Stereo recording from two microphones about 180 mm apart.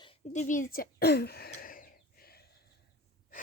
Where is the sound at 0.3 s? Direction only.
45° left (ahead or behind).